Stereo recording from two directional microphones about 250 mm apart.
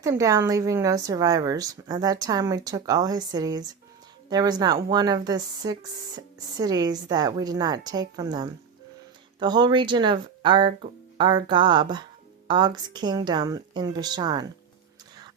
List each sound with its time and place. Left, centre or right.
0.0 s speech: centre